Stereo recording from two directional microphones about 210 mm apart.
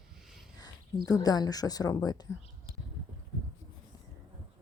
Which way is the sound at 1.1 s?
15° left (ahead or behind).